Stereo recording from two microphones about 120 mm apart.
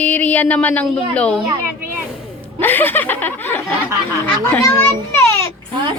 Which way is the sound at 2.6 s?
15° left (ahead or behind).